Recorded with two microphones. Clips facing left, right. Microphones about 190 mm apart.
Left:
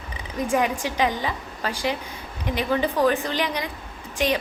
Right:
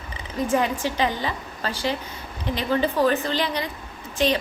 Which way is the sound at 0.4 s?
15° left (ahead or behind).